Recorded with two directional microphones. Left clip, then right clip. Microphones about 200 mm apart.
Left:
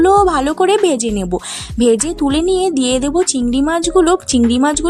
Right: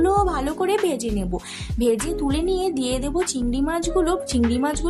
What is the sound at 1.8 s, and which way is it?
Speech, 45° left (ahead or behind).